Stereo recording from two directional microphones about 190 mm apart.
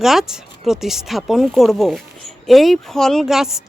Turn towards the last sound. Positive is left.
turn(degrees=0)  # may be behind; listen again after turning